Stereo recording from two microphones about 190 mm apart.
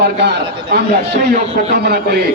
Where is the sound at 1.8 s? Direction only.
55° right (ahead or behind).